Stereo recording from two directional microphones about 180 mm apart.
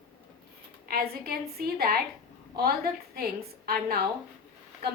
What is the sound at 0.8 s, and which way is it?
A woman's voice, 60° right (ahead or behind).